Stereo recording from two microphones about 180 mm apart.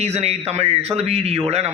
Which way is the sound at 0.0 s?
35° right (ahead or behind).